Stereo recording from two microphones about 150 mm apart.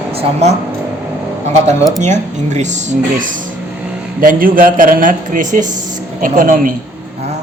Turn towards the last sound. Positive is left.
turn(degrees=-65)  # may be behind; listen again after turning